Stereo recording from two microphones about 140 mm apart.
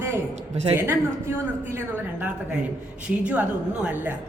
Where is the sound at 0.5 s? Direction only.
45° right (ahead or behind).